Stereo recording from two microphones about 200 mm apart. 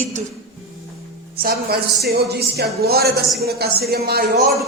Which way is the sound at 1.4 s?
50° right (ahead or behind).